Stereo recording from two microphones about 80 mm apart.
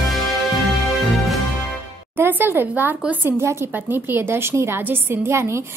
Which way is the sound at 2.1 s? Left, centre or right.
Right.